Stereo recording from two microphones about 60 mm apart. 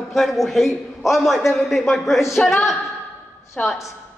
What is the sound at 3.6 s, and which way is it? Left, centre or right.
Speech, centre.